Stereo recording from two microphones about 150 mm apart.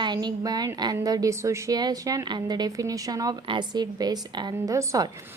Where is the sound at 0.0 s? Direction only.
30° right (ahead or behind).